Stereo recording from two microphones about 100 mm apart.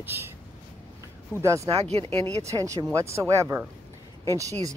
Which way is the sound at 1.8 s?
90° right.